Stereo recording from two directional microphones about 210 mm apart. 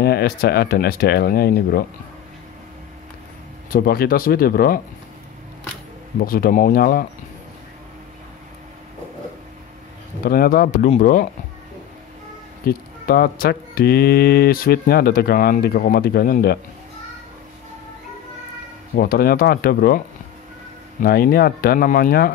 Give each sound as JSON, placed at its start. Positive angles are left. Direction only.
{"t": 0.0, "sound": "speech", "side_deg": 50}
{"t": 3.7, "sound": "speech", "side_deg": 45}
{"t": 6.1, "sound": "speech", "side_deg": 45}
{"t": 10.2, "sound": "speech", "side_deg": 45}
{"t": 12.6, "sound": "speech", "side_deg": 45}
{"t": 18.9, "sound": "speech", "side_deg": 45}
{"t": 21.0, "sound": "speech", "side_deg": 45}